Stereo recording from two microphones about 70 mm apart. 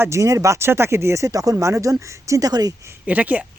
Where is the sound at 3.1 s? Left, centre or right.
Right.